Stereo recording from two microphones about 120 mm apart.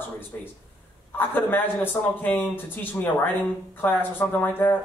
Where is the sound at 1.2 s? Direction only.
15° left (ahead or behind).